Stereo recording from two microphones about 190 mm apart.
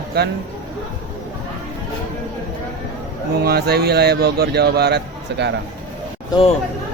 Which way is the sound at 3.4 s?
55° right (ahead or behind).